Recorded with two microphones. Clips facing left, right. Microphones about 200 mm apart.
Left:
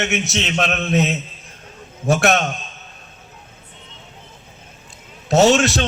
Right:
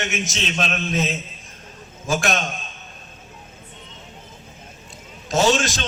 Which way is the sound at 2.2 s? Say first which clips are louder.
Left 8 dB; 65° left (ahead or behind).